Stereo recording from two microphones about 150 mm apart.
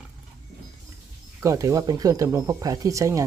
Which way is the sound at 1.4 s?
20° right (ahead or behind).